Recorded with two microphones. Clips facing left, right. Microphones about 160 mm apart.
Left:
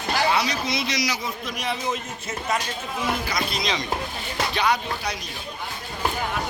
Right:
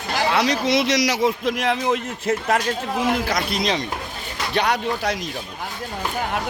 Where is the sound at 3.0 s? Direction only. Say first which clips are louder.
Right 3 dB; 90° right; by 3.8 s 60° right (ahead or behind).